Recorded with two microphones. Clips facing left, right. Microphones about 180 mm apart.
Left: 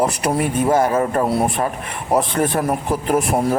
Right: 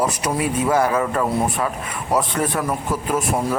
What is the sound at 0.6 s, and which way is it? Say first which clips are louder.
Speech: left 2 dB; 30° left (ahead or behind).